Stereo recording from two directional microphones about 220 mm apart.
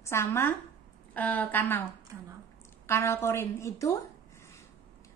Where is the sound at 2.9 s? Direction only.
10° left (ahead or behind).